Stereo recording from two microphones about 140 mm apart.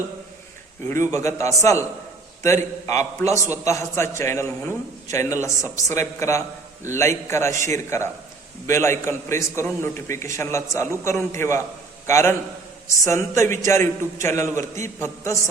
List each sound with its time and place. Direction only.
0.9 s a man's voice: 20° left (ahead or behind)